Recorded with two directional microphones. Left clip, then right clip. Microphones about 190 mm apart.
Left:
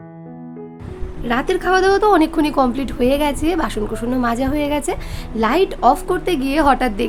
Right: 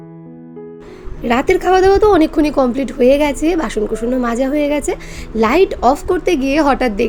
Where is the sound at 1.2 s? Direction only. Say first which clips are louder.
Right 5 dB; 15° right (ahead or behind).